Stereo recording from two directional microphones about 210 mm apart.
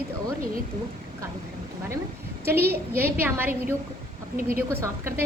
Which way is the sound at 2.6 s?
45° right (ahead or behind).